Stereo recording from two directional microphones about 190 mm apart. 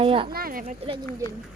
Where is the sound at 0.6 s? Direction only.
30° right (ahead or behind).